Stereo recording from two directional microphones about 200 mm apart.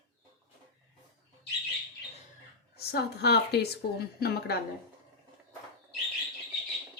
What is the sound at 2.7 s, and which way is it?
Speech, 55° left (ahead or behind).